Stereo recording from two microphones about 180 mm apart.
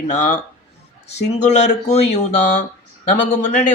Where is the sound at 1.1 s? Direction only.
40° left (ahead or behind).